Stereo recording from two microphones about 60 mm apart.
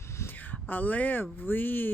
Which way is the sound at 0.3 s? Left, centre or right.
Left.